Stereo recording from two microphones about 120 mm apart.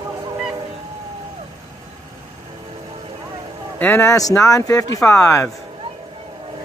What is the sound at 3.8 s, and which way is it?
Speech, 15° left (ahead or behind).